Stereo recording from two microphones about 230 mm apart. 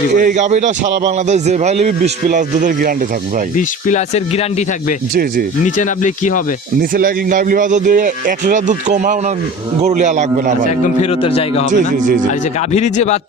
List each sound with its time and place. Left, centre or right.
0.2 s a man's voice: right
3.8 s speech: left
5.6 s speech: left
6.9 s a man's voice: right
11.2 s speech: left
11.7 s a man's voice: right
12.7 s speech: left